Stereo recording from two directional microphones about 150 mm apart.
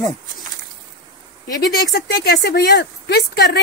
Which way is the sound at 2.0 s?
90° left.